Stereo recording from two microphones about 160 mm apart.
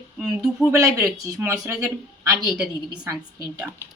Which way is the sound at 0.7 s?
20° right (ahead or behind).